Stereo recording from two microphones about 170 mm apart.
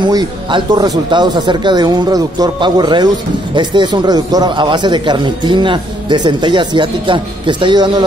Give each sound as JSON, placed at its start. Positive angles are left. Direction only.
{"t": 0.0, "sound": "a man's voice", "side_deg": -25}